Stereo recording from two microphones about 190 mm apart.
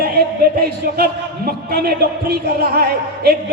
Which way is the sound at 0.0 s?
55° right (ahead or behind).